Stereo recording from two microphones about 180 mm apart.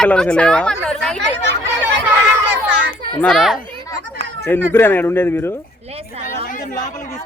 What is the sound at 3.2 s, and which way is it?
Speech, centre (ahead or behind).